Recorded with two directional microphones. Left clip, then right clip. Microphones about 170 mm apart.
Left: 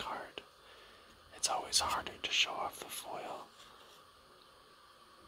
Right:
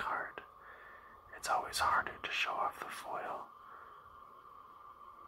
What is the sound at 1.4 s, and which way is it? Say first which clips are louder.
Speech: right 1 dB; 20° left (ahead or behind).